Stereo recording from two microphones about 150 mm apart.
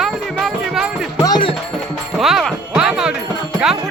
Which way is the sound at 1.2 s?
30° left (ahead or behind).